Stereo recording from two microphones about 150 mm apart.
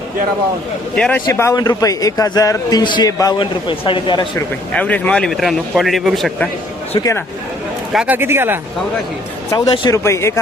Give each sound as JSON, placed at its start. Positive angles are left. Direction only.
{"t": 0.9, "sound": "a man's voice", "side_deg": 5}
{"t": 1.3, "sound": "a man's voice", "side_deg": 20}
{"t": 4.7, "sound": "a man's voice", "side_deg": 10}
{"t": 7.9, "sound": "speech", "side_deg": -10}
{"t": 9.5, "sound": "a man's voice", "side_deg": 30}
{"t": 10.0, "sound": "a man's voice", "side_deg": 20}